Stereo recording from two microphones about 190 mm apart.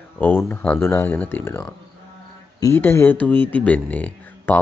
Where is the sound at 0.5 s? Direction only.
10° left (ahead or behind).